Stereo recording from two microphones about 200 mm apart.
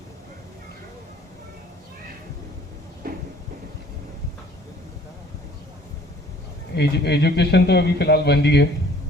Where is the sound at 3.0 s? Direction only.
45° right (ahead or behind).